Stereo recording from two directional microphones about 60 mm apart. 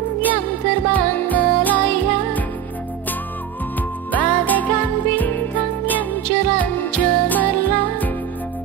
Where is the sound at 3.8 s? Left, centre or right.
Left.